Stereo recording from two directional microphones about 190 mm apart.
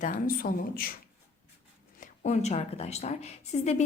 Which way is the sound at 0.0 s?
45° left (ahead or behind).